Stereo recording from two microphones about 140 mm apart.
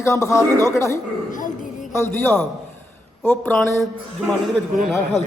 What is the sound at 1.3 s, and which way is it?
Speech, 70° left (ahead or behind).